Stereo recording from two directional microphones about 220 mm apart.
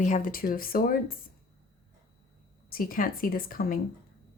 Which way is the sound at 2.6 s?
40° left (ahead or behind).